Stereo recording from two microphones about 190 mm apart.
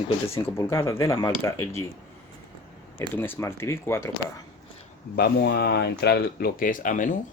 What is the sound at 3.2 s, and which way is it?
Speech, 10° left (ahead or behind).